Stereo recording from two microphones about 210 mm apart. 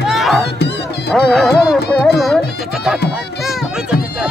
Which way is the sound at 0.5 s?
55° left (ahead or behind).